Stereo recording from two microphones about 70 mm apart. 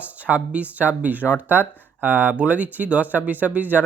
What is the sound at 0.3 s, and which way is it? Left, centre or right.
Speech, centre.